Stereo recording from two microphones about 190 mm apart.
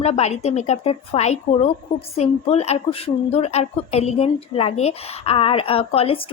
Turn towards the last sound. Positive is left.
turn(degrees=30)  # may be behind; listen again after turning